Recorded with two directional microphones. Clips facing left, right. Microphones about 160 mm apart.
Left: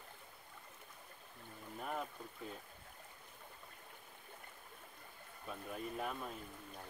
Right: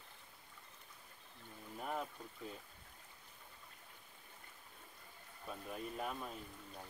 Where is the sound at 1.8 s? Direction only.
Centre (ahead or behind).